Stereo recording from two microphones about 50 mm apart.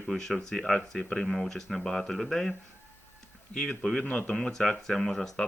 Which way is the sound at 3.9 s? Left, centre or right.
Left.